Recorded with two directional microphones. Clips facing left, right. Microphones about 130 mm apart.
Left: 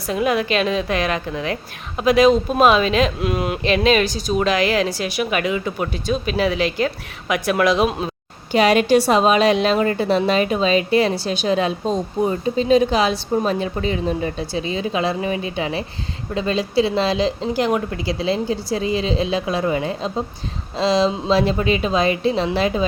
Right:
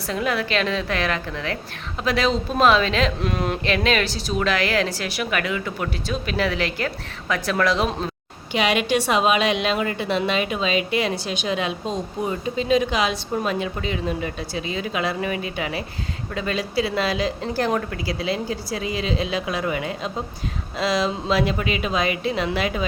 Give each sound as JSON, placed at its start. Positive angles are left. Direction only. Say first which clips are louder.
{"t": 0.1, "sound": "a woman's voice", "louder": "left 4 dB", "side_deg": 15}
{"t": 3.6, "sound": "a woman's voice", "louder": "left 7 dB", "side_deg": 20}
{"t": 8.5, "sound": "a woman's voice", "louder": "left 6 dB", "side_deg": 40}
{"t": 17.9, "sound": "a woman's voice", "louder": "left 4 dB", "side_deg": 25}